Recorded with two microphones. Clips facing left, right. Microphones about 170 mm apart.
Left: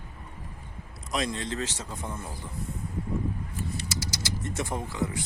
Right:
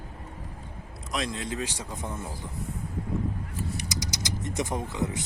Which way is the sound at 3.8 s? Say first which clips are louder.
Right 1 dB; 15° right (ahead or behind).